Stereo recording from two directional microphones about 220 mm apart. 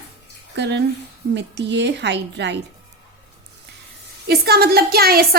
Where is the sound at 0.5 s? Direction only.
50° right (ahead or behind).